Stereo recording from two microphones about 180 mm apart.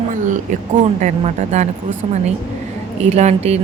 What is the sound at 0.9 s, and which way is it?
Speech, 40° right (ahead or behind).